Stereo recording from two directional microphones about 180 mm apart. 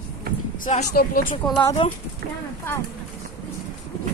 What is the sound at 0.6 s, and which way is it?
Speech, 50° left (ahead or behind).